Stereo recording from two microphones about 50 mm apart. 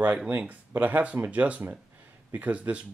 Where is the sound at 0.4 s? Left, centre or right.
Right.